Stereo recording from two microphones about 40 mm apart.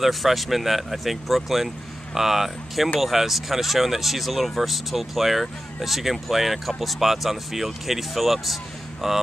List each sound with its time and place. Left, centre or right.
0.0 s speech: centre